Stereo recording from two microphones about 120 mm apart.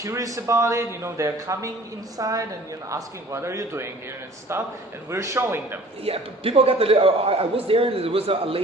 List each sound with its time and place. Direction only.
0.0 s a man's voice: 25° right (ahead or behind)
6.1 s a man's voice: 55° right (ahead or behind)